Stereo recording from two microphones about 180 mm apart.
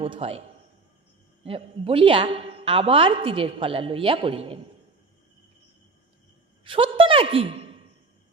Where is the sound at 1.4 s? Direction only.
30° right (ahead or behind).